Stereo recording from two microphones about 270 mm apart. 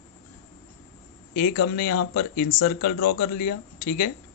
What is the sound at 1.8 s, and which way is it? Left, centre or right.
Speech, left.